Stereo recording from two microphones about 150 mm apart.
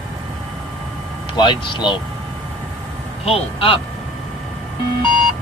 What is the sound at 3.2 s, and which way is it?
Speech, 40° left (ahead or behind).